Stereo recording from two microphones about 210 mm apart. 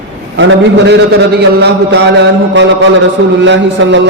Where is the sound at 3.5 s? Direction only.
60° right (ahead or behind).